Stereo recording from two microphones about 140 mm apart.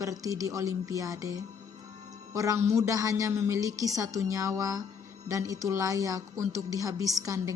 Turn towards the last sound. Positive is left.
turn(degrees=-20)  # may be behind; listen again after turning